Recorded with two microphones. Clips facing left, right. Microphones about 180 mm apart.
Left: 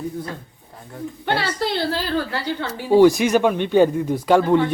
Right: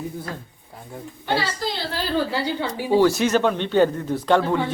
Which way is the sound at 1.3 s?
60° left (ahead or behind).